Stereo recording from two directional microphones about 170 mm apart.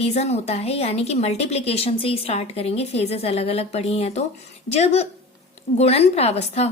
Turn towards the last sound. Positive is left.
turn(degrees=40)  # may be behind; listen again after turning